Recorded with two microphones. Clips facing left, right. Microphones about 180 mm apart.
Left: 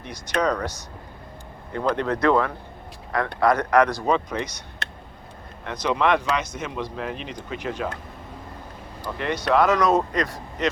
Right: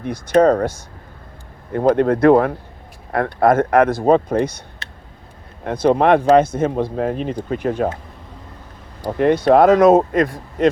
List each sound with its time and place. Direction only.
0.0 s speech: 50° right (ahead or behind)
5.6 s speech: 50° right (ahead or behind)
9.0 s speech: 50° right (ahead or behind)